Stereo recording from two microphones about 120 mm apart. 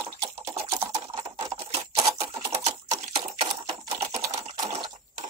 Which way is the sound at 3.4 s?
55° right (ahead or behind).